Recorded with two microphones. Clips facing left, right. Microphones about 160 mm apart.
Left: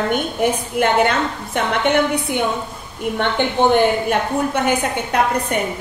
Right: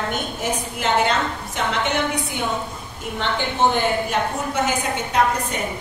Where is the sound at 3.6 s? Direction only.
60° left (ahead or behind).